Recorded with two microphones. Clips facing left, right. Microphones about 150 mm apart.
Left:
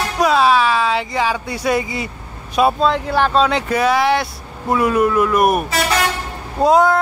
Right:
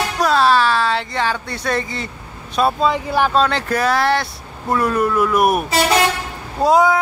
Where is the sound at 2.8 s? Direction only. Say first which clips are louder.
Left 1 dB; 10° right (ahead or behind).